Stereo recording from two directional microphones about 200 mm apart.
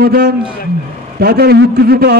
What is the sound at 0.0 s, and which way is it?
A man's voice, 50° right (ahead or behind).